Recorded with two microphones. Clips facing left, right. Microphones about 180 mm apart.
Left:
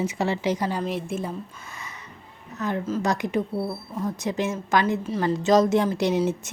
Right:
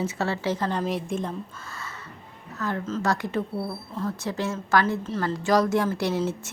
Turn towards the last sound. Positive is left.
turn(degrees=15)  # may be behind; listen again after turning